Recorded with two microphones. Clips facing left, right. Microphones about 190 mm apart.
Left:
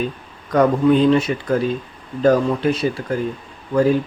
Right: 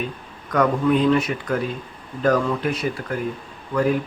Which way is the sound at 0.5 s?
30° left (ahead or behind).